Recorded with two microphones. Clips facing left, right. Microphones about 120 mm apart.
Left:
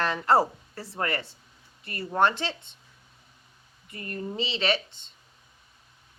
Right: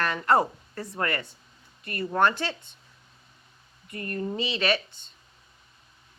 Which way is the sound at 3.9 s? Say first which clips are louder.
Right 3 dB; 25° left (ahead or behind).